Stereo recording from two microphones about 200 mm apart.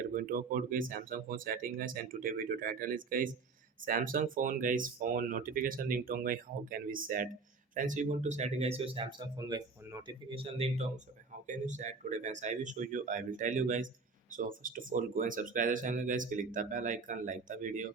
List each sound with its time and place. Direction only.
0.1 s speech: 45° right (ahead or behind)